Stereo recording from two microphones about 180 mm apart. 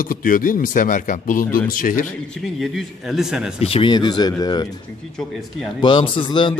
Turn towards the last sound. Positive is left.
turn(degrees=25)  # may be behind; listen again after turning